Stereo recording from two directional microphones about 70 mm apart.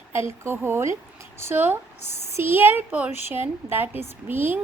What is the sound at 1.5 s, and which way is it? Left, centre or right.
A woman's voice, right.